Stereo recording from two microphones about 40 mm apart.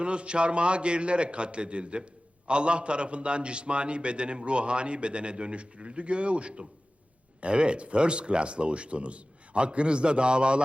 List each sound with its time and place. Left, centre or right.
0.0 s a man's voice: right